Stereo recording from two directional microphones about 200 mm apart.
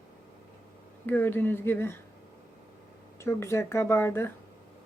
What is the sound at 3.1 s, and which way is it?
Speech, 15° left (ahead or behind).